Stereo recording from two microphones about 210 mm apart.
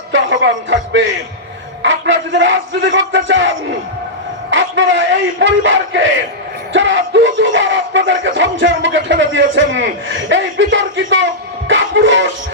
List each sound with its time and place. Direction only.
0.1 s speech: 60° right (ahead or behind)
4.5 s speech: 60° right (ahead or behind)